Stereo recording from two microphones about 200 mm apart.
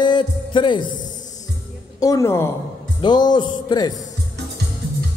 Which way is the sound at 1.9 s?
15° left (ahead or behind).